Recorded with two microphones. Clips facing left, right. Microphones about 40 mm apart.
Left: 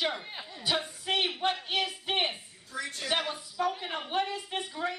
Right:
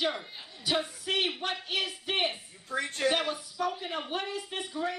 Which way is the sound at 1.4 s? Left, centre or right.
Left.